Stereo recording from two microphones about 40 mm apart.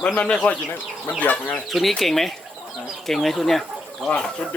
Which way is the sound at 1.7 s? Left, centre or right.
Centre.